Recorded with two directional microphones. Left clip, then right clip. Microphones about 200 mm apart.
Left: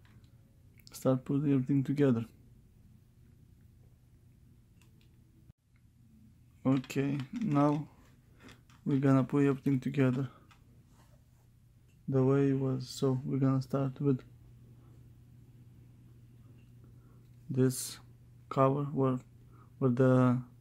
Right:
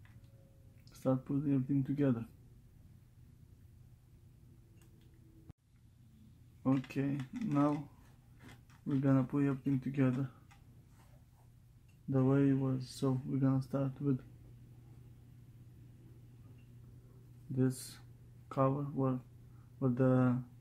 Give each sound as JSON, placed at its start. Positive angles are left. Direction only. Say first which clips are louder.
{"t": 0.8, "sound": "speech", "louder": "left 4 dB", "side_deg": 50}
{"t": 6.6, "sound": "speech", "louder": "left 4 dB", "side_deg": 50}
{"t": 9.0, "sound": "speech", "louder": "left 5 dB", "side_deg": 50}
{"t": 12.1, "sound": "speech", "louder": "left 3 dB", "side_deg": 45}
{"t": 17.6, "sound": "speech", "louder": "left 5 dB", "side_deg": 45}